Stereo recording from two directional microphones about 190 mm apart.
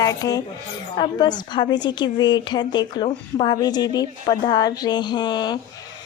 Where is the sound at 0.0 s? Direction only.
20° left (ahead or behind).